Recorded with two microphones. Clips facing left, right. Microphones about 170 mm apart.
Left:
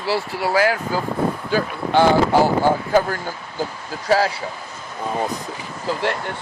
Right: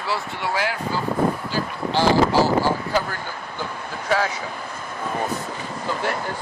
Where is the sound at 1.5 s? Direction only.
55° left (ahead or behind).